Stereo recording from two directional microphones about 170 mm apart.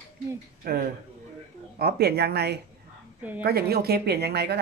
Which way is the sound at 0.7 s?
65° right (ahead or behind).